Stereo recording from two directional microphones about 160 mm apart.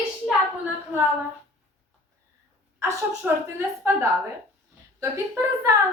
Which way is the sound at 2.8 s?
15° right (ahead or behind).